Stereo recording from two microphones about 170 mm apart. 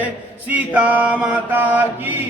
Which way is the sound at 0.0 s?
10° right (ahead or behind).